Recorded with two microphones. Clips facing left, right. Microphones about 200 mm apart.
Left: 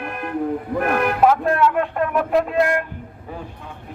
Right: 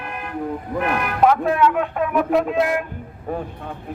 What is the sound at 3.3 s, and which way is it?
Speech, 55° right (ahead or behind).